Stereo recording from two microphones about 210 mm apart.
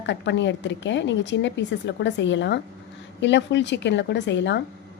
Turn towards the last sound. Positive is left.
turn(degrees=55)  # may be behind; listen again after turning